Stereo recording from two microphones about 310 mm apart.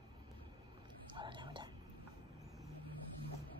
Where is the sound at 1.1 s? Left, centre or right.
Centre.